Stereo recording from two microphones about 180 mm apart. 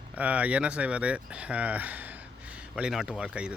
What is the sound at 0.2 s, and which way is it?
Speech, 10° right (ahead or behind).